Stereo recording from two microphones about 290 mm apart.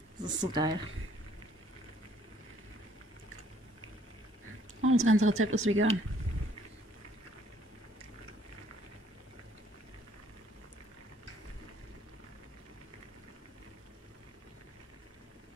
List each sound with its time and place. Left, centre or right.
0.2 s speech: centre
4.8 s a woman's voice: right